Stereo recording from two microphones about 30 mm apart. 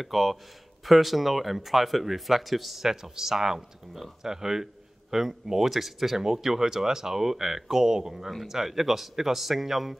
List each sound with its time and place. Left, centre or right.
0.0 s speech: centre